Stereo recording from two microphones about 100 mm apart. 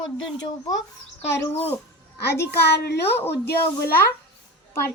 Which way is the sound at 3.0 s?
25° left (ahead or behind).